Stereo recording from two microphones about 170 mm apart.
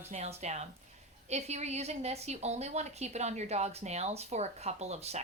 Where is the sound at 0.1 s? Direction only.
40° right (ahead or behind).